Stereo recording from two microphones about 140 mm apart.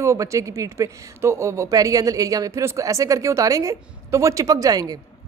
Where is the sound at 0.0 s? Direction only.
20° right (ahead or behind).